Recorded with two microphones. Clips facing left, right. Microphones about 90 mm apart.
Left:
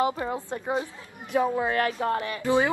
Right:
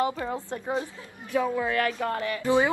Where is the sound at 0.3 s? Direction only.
15° left (ahead or behind).